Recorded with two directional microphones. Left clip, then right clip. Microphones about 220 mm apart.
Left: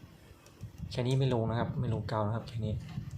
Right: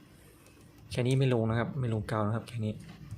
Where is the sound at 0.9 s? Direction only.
20° right (ahead or behind).